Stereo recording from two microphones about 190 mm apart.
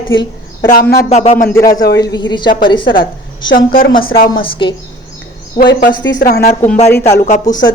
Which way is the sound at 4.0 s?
50° left (ahead or behind).